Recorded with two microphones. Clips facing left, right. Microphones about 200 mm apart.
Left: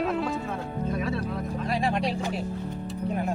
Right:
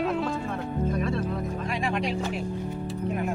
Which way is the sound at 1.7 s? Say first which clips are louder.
Left 3 dB; 35° left (ahead or behind).